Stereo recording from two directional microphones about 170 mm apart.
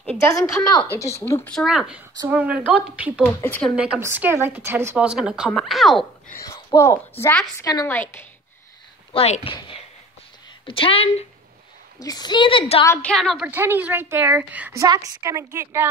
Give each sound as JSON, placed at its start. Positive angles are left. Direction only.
{"t": 0.9, "sound": "a woman's voice", "side_deg": 15}
{"t": 1.5, "sound": "a woman's voice", "side_deg": 0}
{"t": 3.4, "sound": "a woman's voice", "side_deg": 10}
{"t": 3.7, "sound": "a woman's voice", "side_deg": -5}
{"t": 6.4, "sound": "a woman's voice", "side_deg": 20}
{"t": 9.1, "sound": "speech", "side_deg": 35}
{"t": 12.0, "sound": "a woman's voice", "side_deg": 25}
{"t": 12.8, "sound": "a woman's voice", "side_deg": 15}
{"t": 13.1, "sound": "speech", "side_deg": 0}
{"t": 13.5, "sound": "a woman's voice", "side_deg": -10}